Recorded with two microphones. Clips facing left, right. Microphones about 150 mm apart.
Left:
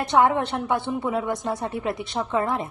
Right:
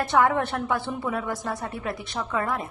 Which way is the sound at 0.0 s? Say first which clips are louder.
Left 2 dB; 20° left (ahead or behind).